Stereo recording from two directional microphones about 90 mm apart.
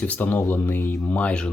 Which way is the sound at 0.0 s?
15° left (ahead or behind).